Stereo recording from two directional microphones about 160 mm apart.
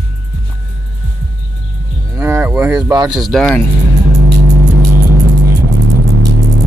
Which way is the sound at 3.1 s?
Centre (ahead or behind).